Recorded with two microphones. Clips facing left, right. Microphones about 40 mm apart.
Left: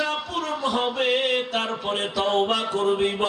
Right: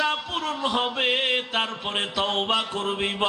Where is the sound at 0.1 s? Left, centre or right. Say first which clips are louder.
Left 1 dB; right.